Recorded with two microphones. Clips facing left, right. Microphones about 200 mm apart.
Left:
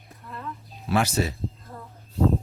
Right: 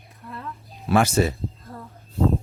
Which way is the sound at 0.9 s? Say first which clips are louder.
Right 5 dB; 50° right (ahead or behind).